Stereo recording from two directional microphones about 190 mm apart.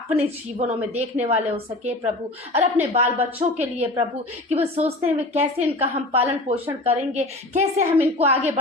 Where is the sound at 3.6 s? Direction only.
35° right (ahead or behind).